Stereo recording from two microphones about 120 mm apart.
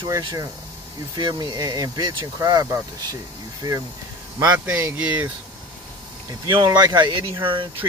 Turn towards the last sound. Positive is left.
turn(degrees=-45)  # may be behind; listen again after turning